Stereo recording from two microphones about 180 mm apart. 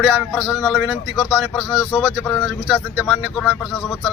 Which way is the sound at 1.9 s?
5° left (ahead or behind).